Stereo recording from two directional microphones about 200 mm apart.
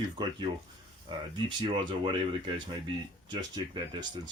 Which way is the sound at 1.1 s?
25° right (ahead or behind).